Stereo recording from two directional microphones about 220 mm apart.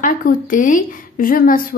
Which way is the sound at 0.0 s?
40° left (ahead or behind).